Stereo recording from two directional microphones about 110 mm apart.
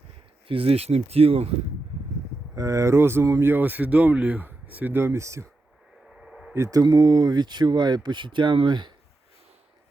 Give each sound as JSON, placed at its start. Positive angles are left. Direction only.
{"t": 0.4, "sound": "speech", "side_deg": -60}
{"t": 2.6, "sound": "speech", "side_deg": -30}
{"t": 6.1, "sound": "a sound", "side_deg": -5}
{"t": 6.5, "sound": "speech", "side_deg": -30}